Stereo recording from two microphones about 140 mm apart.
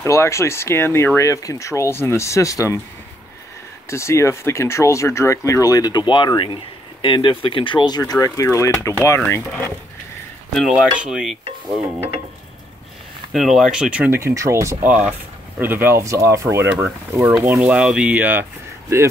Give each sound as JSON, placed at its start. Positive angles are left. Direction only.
{"t": 0.0, "sound": "speech", "side_deg": 20}
{"t": 3.9, "sound": "speech", "side_deg": 20}
{"t": 10.5, "sound": "speech", "side_deg": 0}
{"t": 13.3, "sound": "speech", "side_deg": 0}
{"t": 14.2, "sound": "speech", "side_deg": -20}